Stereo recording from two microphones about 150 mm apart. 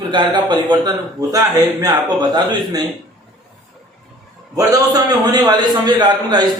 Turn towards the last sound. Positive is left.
turn(degrees=-30)  # may be behind; listen again after turning